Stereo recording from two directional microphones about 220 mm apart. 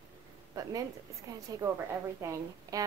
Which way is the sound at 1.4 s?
15° right (ahead or behind).